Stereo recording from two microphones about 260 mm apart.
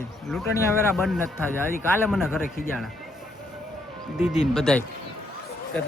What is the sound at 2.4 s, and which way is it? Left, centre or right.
Speech, left.